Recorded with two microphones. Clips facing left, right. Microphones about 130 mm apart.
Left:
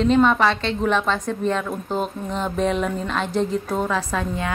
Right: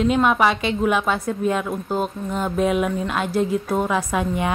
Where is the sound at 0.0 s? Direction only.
10° right (ahead or behind).